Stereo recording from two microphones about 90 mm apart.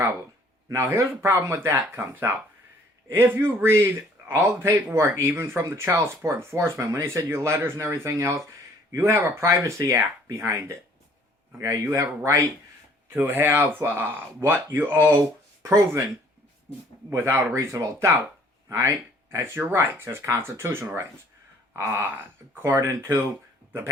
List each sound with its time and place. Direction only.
0.7 s speech: 30° right (ahead or behind)
13.1 s speech: 20° right (ahead or behind)
15.7 s speech: 35° right (ahead or behind)
17.1 s speech: 30° right (ahead or behind)